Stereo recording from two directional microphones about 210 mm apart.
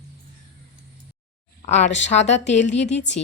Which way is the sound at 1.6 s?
35° left (ahead or behind).